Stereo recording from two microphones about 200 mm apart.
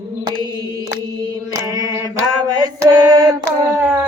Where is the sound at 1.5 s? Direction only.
20° right (ahead or behind).